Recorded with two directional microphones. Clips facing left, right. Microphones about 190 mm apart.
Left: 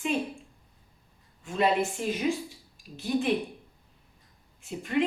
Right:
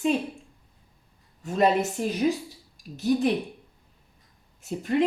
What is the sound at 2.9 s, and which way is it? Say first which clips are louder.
Speech: right 4 dB; 40° right (ahead or behind).